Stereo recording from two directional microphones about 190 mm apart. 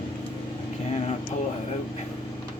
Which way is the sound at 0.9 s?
35° left (ahead or behind).